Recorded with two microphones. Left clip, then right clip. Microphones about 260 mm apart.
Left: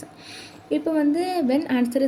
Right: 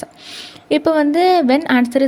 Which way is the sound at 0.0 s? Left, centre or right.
Centre.